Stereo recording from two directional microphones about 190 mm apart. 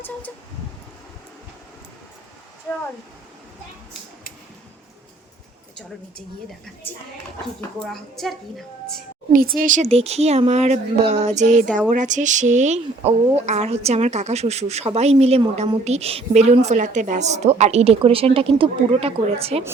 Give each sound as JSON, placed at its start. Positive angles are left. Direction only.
{"t": 7.8, "sound": "a woman's voice", "side_deg": 0}
{"t": 9.3, "sound": "speech", "side_deg": -50}